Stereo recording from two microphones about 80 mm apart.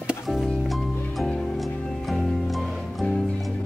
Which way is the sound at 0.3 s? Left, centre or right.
Centre.